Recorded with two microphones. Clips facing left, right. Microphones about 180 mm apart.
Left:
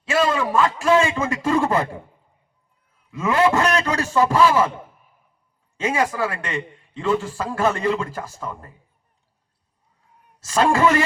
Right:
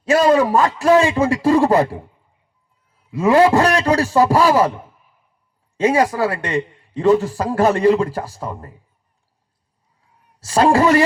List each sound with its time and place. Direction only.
0.0 s a man's voice: 40° right (ahead or behind)
3.1 s a man's voice: 35° right (ahead or behind)
5.7 s a man's voice: 35° right (ahead or behind)
10.4 s a man's voice: 35° right (ahead or behind)